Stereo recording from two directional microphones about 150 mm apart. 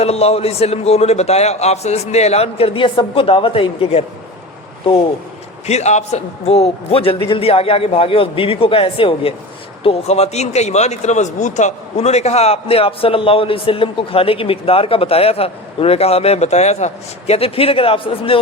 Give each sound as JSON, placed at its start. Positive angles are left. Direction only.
{"t": 0.0, "sound": "a man's voice", "side_deg": 45}
{"t": 5.6, "sound": "a man's voice", "side_deg": 45}